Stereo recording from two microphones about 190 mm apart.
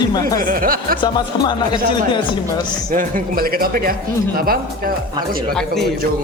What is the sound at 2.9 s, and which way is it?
Speech, 45° right (ahead or behind).